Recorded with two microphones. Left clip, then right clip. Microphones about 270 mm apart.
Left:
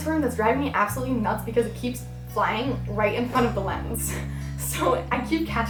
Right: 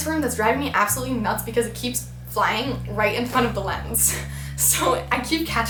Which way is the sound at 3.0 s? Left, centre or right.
Centre.